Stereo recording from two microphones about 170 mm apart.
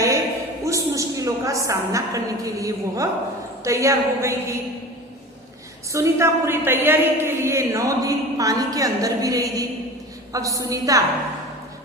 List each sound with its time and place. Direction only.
0.6 s a woman's voice: 20° right (ahead or behind)
5.9 s a woman's voice: 15° right (ahead or behind)